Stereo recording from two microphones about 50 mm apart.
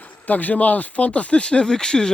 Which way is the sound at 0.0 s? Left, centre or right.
Left.